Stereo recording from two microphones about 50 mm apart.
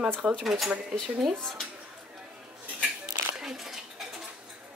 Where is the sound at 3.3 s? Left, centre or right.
Centre.